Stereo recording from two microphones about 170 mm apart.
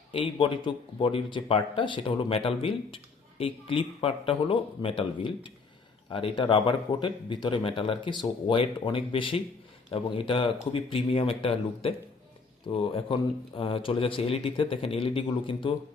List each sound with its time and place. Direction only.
0.3 s speech: 30° left (ahead or behind)